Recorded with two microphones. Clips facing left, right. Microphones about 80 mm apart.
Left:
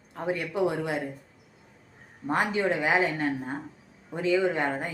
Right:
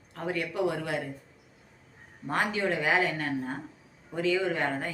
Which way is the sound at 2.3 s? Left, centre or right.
Left.